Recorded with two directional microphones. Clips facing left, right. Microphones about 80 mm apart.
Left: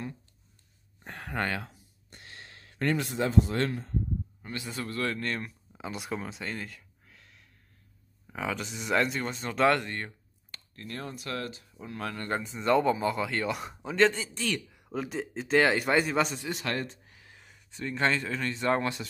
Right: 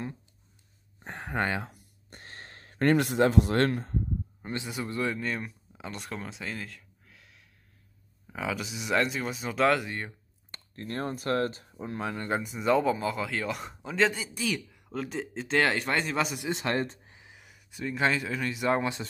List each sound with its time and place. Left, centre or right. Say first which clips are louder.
0.9 s a sound: right 2 dB; right
1.7 s a sound: right 3 dB; right
4.4 s a man's voice: right 2 dB; right
5.2 s speech: right 1 dB; centre
10.5 s speech: right 5 dB; right
12.0 s a man's voice: right 1 dB; centre
12.3 s speech: even; centre
16.3 s a man's voice: right 3 dB; right
17.0 s a sound: right 2 dB; right
17.3 s speech: right 1 dB; centre